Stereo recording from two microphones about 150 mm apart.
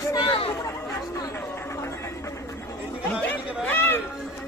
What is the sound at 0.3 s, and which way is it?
Chatter, 40° left (ahead or behind).